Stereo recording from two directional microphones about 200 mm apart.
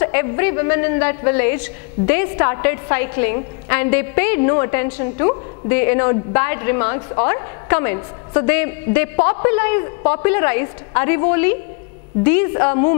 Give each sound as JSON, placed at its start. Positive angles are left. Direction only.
{"t": 0.0, "sound": "a man's voice", "side_deg": 15}